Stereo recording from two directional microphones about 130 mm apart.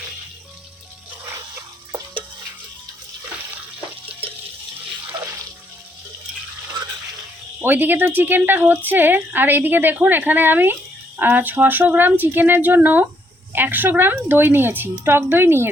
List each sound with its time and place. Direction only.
7.6 s a woman's voice: 15° right (ahead or behind)